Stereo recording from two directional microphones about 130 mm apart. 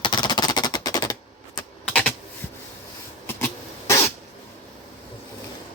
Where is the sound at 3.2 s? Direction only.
20° left (ahead or behind).